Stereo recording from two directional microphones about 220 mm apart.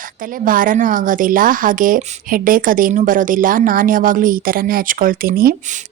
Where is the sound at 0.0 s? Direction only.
40° right (ahead or behind).